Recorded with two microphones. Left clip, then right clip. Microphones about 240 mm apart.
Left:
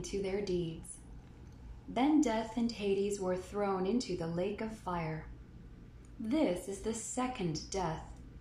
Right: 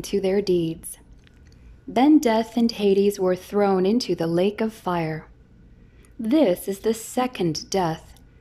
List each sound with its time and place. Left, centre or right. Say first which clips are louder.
0.0 s speech: right 14 dB; right
2.0 s speech: right 13 dB; right
6.2 s speech: right 13 dB; right